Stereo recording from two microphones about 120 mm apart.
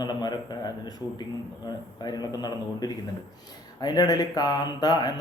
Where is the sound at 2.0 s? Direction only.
35° left (ahead or behind).